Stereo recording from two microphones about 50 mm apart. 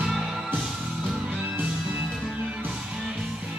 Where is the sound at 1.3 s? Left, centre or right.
Right.